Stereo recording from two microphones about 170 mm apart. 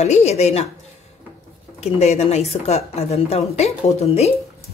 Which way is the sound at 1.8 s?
40° left (ahead or behind).